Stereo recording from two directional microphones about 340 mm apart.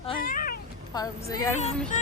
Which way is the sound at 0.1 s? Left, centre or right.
Left.